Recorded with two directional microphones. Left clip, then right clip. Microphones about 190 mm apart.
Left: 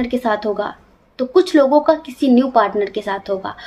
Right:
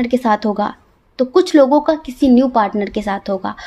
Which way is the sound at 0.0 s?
50° right (ahead or behind).